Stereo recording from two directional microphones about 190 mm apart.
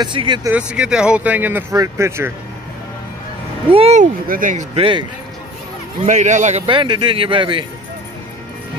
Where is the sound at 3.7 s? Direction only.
30° right (ahead or behind).